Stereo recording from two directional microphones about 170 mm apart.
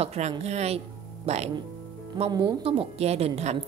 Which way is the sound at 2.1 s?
25° right (ahead or behind).